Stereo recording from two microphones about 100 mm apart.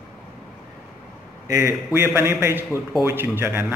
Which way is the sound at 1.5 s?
25° right (ahead or behind).